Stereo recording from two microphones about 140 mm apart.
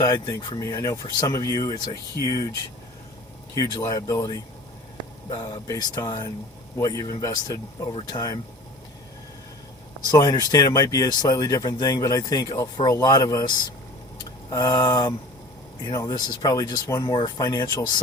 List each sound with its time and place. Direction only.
0.0 s speech: 30° left (ahead or behind)
3.5 s speech: 25° left (ahead or behind)
10.1 s speech: 25° left (ahead or behind)
14.5 s speech: 30° left (ahead or behind)